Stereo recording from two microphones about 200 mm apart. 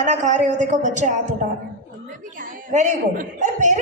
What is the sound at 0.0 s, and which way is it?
Speech, 35° right (ahead or behind).